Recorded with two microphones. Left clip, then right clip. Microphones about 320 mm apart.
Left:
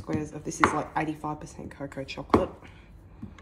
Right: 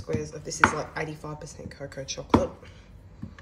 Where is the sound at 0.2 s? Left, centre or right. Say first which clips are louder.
Right 2 dB; centre.